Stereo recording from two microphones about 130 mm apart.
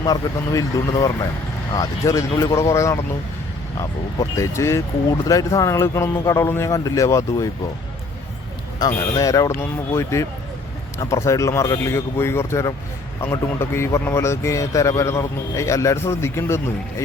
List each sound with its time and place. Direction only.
0.0 s speech: 30° left (ahead or behind)
9.1 s speech: 25° left (ahead or behind)